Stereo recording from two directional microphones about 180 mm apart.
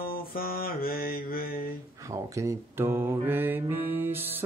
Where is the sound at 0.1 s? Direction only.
55° left (ahead or behind).